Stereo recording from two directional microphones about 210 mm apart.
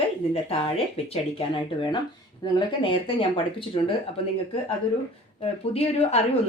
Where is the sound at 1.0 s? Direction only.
25° left (ahead or behind).